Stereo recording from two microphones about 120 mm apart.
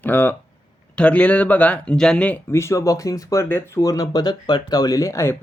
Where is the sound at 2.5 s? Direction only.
25° left (ahead or behind).